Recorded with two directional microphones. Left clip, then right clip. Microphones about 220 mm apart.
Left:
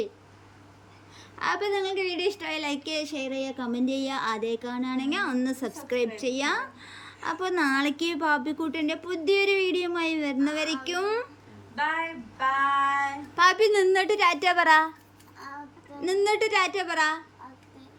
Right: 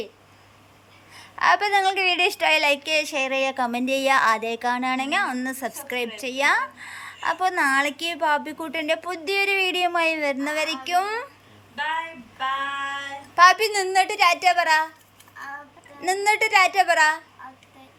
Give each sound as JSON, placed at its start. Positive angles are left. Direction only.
{"t": 1.1, "sound": "a woman's voice", "side_deg": 0}
{"t": 12.7, "sound": "female singing", "side_deg": 25}
{"t": 13.3, "sound": "a woman's voice", "side_deg": 5}
{"t": 16.0, "sound": "a woman's voice", "side_deg": 0}